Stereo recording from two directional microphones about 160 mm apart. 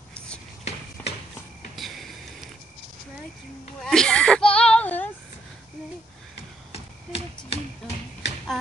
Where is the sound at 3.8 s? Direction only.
5° left (ahead or behind).